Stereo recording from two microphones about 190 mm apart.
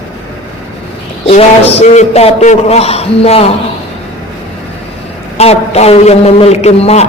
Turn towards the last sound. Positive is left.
turn(degrees=35)  # may be behind; listen again after turning